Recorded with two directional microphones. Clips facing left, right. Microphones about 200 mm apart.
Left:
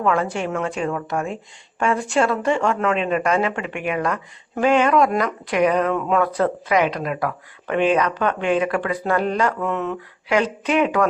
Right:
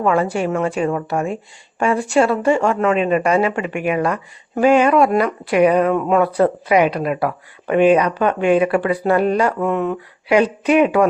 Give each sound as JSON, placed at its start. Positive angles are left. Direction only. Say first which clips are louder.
{"t": 0.0, "sound": "speech", "louder": "right 4 dB", "side_deg": -10}